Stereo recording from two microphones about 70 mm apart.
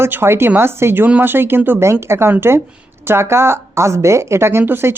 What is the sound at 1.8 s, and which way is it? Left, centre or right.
Speech, right.